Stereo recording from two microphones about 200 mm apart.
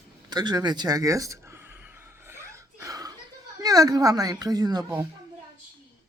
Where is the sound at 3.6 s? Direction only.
15° right (ahead or behind).